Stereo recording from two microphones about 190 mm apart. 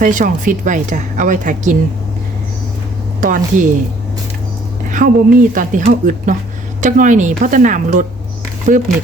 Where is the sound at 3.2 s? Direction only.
45° right (ahead or behind).